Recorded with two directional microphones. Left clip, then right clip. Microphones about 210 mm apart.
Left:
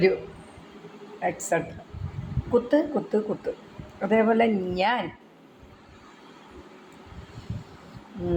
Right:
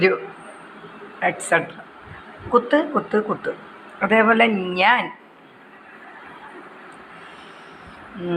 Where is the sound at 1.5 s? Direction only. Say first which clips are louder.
Right 7 dB; 10° left (ahead or behind).